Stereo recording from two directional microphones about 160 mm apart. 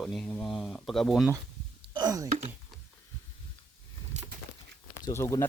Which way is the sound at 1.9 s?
20° right (ahead or behind).